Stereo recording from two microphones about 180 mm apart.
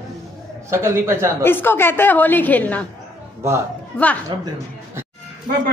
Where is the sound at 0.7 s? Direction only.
15° right (ahead or behind).